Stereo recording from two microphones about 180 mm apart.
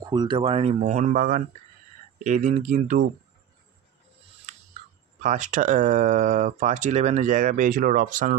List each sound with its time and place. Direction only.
0.0 s speech: 25° right (ahead or behind); by 1.4 s 50° right (ahead or behind)
2.2 s speech: 40° right (ahead or behind)
5.2 s speech: 40° right (ahead or behind)